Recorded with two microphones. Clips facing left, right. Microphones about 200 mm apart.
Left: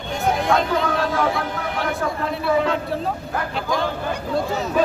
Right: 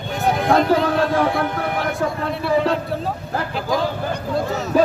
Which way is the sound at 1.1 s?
55° right (ahead or behind).